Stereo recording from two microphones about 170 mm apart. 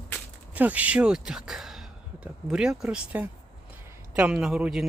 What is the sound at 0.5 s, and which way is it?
Speech, 10° right (ahead or behind).